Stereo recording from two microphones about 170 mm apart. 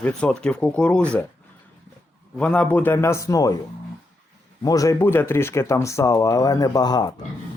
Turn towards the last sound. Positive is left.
turn(degrees=25)  # may be behind; listen again after turning